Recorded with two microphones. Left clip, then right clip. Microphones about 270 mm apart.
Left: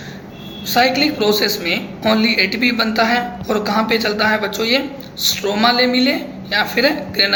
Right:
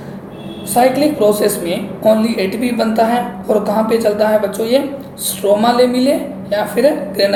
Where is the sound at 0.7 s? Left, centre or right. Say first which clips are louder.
Right 2 dB; centre.